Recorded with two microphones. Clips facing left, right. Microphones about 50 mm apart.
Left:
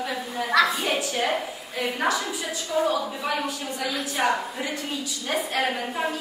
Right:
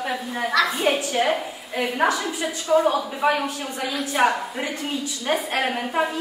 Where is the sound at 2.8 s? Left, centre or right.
Right.